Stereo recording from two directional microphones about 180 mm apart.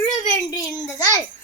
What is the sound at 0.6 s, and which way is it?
Speech, 20° left (ahead or behind).